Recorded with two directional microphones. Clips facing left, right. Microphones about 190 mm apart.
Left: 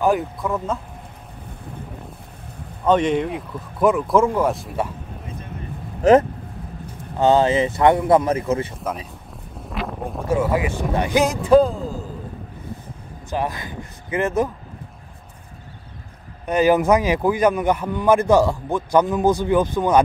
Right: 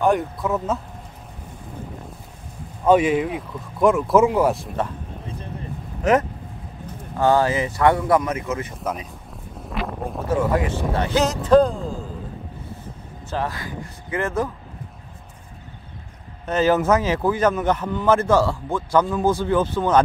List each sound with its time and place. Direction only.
0.0 s speech: centre (ahead or behind)
2.8 s speech: 5° right (ahead or behind)
6.0 s speech: 30° left (ahead or behind)
7.2 s speech: 20° left (ahead or behind)
9.7 s a sound: centre (ahead or behind)
10.2 s a man's voice: 10° left (ahead or behind)
13.3 s speech: 15° left (ahead or behind)
16.4 s a man's voice: 15° left (ahead or behind)